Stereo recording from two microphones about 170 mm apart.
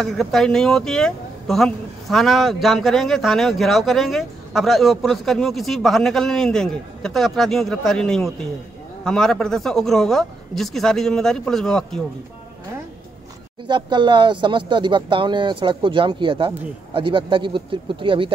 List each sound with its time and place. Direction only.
0.0 s speech: centre (ahead or behind)
13.7 s speech: 25° right (ahead or behind)